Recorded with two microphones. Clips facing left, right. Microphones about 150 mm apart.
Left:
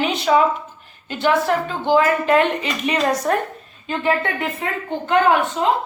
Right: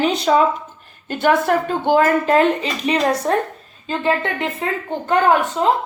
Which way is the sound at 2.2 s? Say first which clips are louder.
Right 2 dB; 30° right (ahead or behind).